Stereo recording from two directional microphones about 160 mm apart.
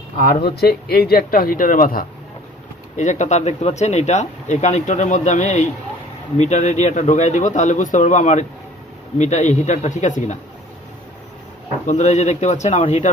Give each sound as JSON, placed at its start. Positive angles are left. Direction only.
{"t": 0.2, "sound": "speech", "side_deg": 70}
{"t": 3.0, "sound": "speech", "side_deg": 50}
{"t": 11.8, "sound": "speech", "side_deg": 45}